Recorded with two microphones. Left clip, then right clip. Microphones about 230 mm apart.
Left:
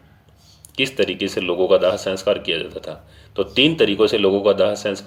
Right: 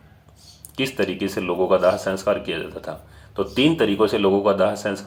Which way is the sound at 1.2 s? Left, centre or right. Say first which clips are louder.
Left 2 dB; left.